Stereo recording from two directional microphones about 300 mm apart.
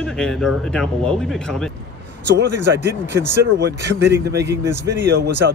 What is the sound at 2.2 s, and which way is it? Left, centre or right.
Speech, right.